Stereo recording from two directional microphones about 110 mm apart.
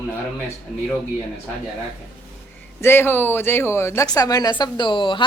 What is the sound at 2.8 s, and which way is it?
Speech, 20° left (ahead or behind).